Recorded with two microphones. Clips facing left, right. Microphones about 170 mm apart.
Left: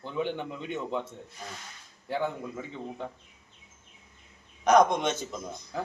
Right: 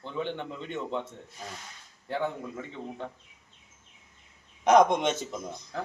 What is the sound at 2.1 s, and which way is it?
A man's voice, 5° left (ahead or behind).